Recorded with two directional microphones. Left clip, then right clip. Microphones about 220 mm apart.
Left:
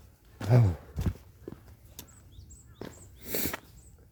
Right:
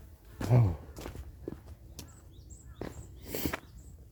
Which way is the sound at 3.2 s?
30° left (ahead or behind).